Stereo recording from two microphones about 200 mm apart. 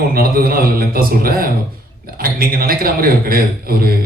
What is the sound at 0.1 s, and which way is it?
A man's voice, 50° right (ahead or behind).